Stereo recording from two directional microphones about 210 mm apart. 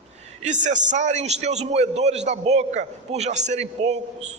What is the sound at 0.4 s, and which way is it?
A man's voice, 35° right (ahead or behind).